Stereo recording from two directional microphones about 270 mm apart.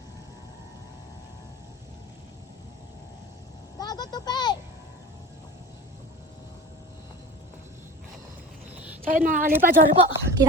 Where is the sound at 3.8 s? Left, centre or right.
Centre.